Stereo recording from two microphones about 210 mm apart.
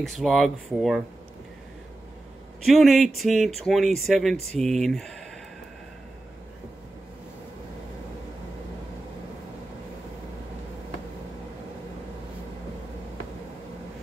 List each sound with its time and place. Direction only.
0.0 s speech: centre (ahead or behind)
2.6 s speech: centre (ahead or behind)